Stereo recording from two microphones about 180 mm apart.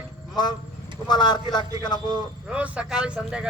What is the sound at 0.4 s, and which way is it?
A man's voice, 25° left (ahead or behind).